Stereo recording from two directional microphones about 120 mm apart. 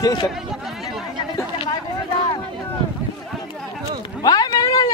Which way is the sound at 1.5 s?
40° left (ahead or behind).